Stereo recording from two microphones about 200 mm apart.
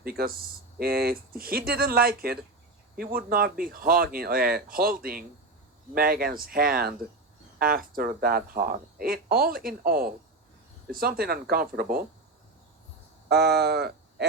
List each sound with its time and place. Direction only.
0.0 s speech: 50° right (ahead or behind)
13.2 s speech: 55° right (ahead or behind)